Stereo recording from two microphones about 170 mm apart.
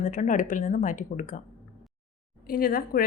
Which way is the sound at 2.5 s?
60° left (ahead or behind).